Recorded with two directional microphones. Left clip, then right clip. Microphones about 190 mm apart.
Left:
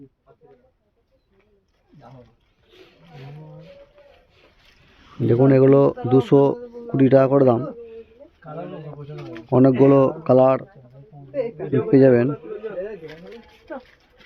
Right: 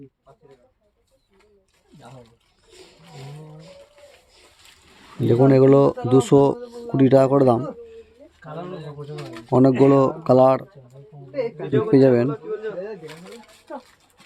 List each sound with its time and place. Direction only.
2.6 s roaring cats: 20° right (ahead or behind)
5.2 s speech: 20° right (ahead or behind)
8.4 s a sound: 50° right (ahead or behind)
9.3 s speech: 15° right (ahead or behind)
11.3 s a sound: 60° right (ahead or behind)
11.9 s speech: 15° right (ahead or behind)